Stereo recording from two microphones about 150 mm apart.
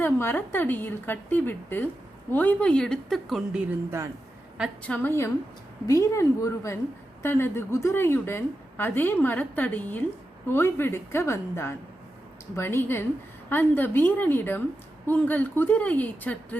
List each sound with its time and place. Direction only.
0.0 s a woman's voice: 15° left (ahead or behind); by 3.8 s 5° right (ahead or behind)
4.8 s a woman's voice: 10° left (ahead or behind)